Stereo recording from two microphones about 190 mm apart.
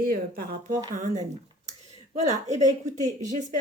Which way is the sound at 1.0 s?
40° right (ahead or behind).